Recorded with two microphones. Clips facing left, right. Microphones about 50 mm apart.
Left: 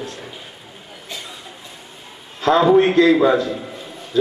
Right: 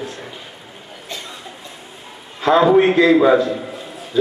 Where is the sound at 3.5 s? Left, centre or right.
Centre.